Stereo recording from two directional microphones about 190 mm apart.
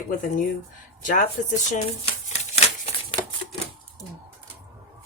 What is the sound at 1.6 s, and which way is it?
Shuffling cards, 40° left (ahead or behind).